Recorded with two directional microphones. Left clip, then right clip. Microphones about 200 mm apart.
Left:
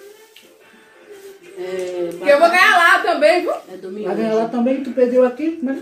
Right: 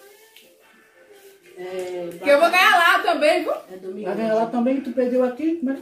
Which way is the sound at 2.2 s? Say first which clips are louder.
Left 3 dB; 15° right (ahead or behind).